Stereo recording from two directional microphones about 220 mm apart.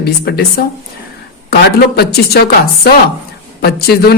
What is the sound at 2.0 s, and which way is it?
Speech, 45° left (ahead or behind).